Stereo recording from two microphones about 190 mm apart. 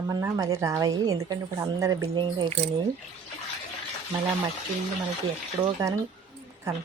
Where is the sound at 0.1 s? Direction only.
15° right (ahead or behind).